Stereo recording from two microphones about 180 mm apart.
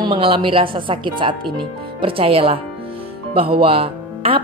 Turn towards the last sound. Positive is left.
turn(degrees=-30)  # may be behind; listen again after turning